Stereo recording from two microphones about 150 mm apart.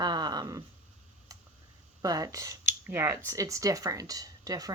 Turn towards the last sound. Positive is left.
turn(degrees=-25)  # may be behind; listen again after turning